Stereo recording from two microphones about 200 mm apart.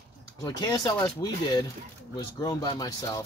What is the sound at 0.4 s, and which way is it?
Speech, 20° left (ahead or behind).